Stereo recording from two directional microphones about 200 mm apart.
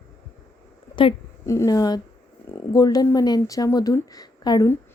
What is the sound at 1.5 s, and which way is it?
A woman's voice, 15° left (ahead or behind).